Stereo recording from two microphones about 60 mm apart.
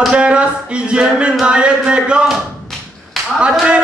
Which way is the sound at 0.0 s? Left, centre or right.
Centre.